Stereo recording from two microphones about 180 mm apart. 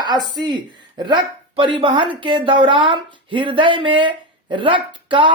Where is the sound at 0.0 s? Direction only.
25° right (ahead or behind).